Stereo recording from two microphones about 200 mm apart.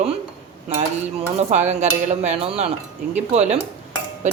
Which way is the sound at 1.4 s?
35° right (ahead or behind).